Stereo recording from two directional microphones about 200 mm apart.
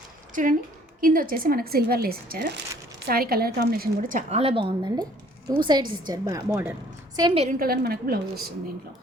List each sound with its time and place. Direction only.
0.4 s speech: 40° right (ahead or behind)
4.3 s a woman's voice: 30° right (ahead or behind)
7.4 s speech: 50° right (ahead or behind)